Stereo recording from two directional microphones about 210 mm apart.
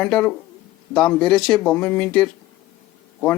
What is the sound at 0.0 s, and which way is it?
Speech, 5° left (ahead or behind).